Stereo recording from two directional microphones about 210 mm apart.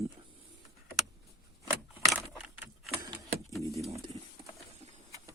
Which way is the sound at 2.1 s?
5° right (ahead or behind).